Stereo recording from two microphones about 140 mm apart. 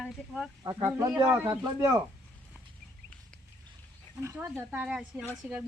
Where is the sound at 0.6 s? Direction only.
25° right (ahead or behind).